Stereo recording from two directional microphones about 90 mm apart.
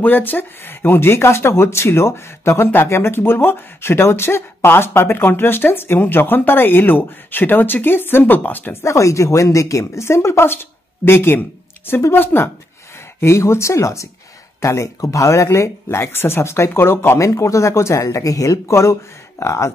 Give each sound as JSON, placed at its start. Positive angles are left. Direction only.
{"t": 0.0, "sound": "speech", "side_deg": 20}
{"t": 8.8, "sound": "speech", "side_deg": 35}